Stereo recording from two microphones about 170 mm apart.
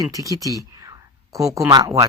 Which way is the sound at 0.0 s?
20° right (ahead or behind).